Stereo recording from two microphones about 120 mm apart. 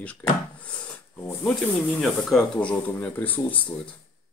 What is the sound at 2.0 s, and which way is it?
Speech, 5° left (ahead or behind).